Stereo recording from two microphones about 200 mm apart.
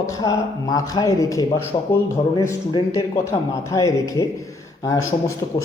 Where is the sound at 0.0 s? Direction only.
15° left (ahead or behind).